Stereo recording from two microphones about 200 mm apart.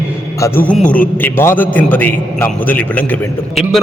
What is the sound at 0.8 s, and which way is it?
Speech, 45° left (ahead or behind).